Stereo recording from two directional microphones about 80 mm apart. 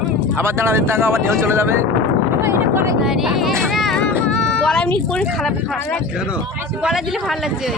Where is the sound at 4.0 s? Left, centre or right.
Centre.